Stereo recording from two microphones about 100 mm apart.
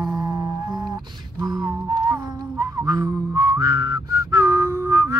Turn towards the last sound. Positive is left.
turn(degrees=-30)  # may be behind; listen again after turning